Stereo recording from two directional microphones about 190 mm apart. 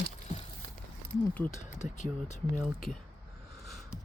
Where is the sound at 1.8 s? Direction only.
5° right (ahead or behind).